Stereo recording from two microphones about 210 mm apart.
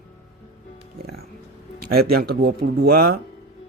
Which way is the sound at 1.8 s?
45° right (ahead or behind).